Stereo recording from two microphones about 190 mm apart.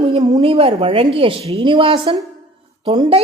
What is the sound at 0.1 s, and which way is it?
A woman's voice, 25° right (ahead or behind).